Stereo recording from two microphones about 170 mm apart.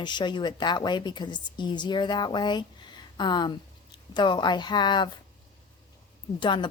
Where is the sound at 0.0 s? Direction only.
25° left (ahead or behind).